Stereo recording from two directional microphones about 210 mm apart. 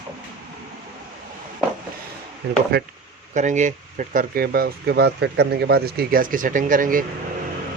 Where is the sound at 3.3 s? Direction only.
35° right (ahead or behind).